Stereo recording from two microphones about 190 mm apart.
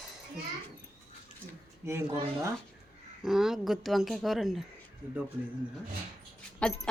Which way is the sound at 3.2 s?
Centre (ahead or behind).